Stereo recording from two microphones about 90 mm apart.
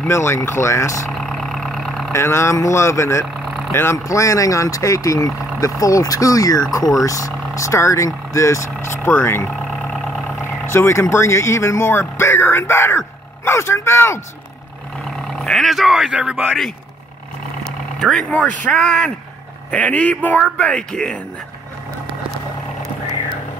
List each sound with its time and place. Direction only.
0.1 s speech: 30° left (ahead or behind)
1.1 s vehicle: 5° left (ahead or behind)
2.1 s speech: 30° left (ahead or behind)
3.4 s vehicle: 5° right (ahead or behind)
3.7 s speech: 30° left (ahead or behind)
6.8 s speech: centre (ahead or behind)
7.1 s speech: 40° left (ahead or behind)
9.7 s vehicle: 5° left (ahead or behind)
10.4 s speech: 25° left (ahead or behind)
15.0 s speech: centre (ahead or behind)
17.6 s vehicle: 5° left (ahead or behind)
18.3 s speech: 15° left (ahead or behind)
19.7 s speech: 15° left (ahead or behind)